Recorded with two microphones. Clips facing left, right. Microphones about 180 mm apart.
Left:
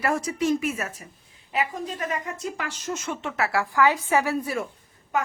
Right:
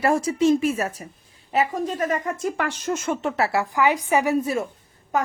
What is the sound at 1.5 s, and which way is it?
Speech, 45° right (ahead or behind).